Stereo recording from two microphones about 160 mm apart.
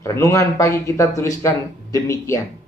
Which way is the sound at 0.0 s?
20° left (ahead or behind).